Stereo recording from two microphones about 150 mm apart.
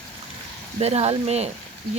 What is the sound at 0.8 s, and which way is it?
Speech, 40° right (ahead or behind).